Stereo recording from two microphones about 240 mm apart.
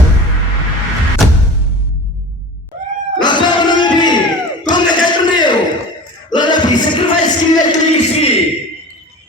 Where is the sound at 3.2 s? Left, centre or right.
Centre.